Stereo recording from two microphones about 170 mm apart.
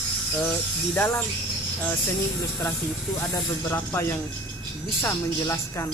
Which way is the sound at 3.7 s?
15° left (ahead or behind).